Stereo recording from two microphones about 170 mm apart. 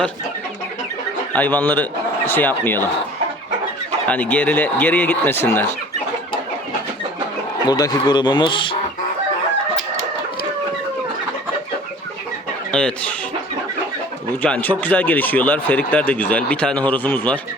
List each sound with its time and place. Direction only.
1.3 s speech: 10° left (ahead or behind)
4.0 s speech: 10° left (ahead or behind)
7.7 s speech: 25° left (ahead or behind)
12.7 s speech: 5° left (ahead or behind)
14.4 s speech: 10° left (ahead or behind)